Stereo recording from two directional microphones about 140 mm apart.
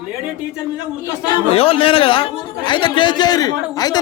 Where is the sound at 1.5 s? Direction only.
45° left (ahead or behind).